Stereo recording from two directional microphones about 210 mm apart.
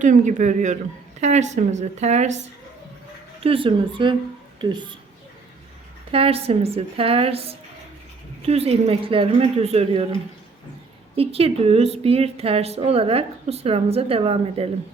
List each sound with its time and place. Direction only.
0.0 s speech: 35° right (ahead or behind)
3.4 s a woman's voice: 25° right (ahead or behind)
6.1 s a woman's voice: 25° right (ahead or behind)
11.2 s a woman's voice: 30° right (ahead or behind)